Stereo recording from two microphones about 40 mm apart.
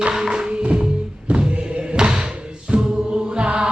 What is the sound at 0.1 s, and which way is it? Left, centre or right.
Music, centre.